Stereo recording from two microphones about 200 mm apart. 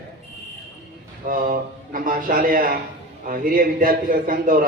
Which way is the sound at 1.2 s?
45° right (ahead or behind).